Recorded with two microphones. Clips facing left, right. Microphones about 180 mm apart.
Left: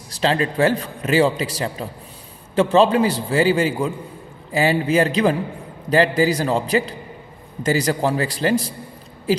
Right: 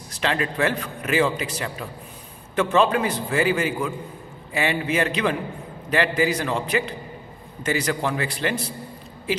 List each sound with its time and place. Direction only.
0.1 s a man's voice: 30° left (ahead or behind)